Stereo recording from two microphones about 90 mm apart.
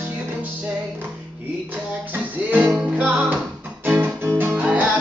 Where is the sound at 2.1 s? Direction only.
20° right (ahead or behind).